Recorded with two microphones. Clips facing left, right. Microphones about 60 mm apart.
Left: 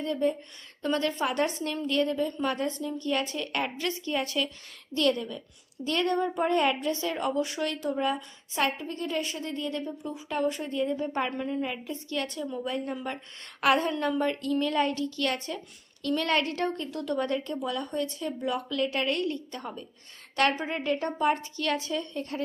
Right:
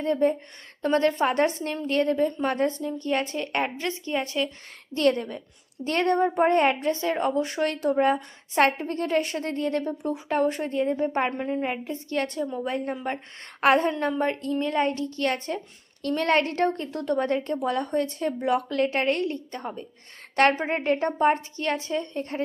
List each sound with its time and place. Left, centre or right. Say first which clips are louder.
0.0 s a woman's voice: right 5 dB; right
17.6 s a woman's voice: right 5 dB; right